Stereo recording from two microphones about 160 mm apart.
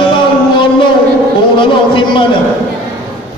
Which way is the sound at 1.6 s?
30° left (ahead or behind).